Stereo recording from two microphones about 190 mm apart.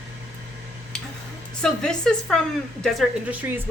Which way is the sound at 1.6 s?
5° left (ahead or behind).